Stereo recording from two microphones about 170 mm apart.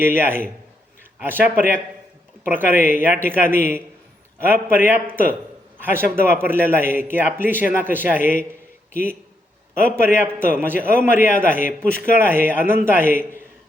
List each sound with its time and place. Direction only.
0.0 s a man's voice: 10° right (ahead or behind)
4.7 s a man's voice: 10° right (ahead or behind)
8.2 s a man's voice: 50° left (ahead or behind)
9.8 s a man's voice: 15° right (ahead or behind)